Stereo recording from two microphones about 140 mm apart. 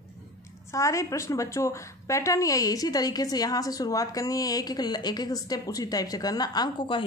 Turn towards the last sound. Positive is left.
turn(degrees=35)  # may be behind; listen again after turning